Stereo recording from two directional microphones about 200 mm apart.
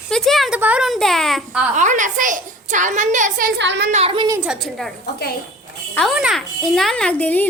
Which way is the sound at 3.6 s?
60° right (ahead or behind).